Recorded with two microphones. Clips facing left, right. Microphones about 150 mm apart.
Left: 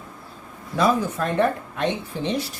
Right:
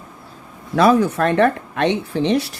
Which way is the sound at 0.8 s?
75° right (ahead or behind).